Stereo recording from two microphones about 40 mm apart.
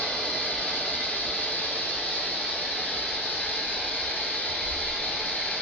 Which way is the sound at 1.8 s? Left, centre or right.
Left.